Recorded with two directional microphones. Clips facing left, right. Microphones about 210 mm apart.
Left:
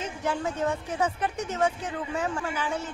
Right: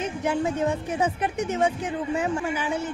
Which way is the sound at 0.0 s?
15° right (ahead or behind).